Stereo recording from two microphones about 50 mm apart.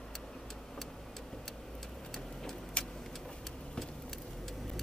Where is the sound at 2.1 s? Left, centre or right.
Centre.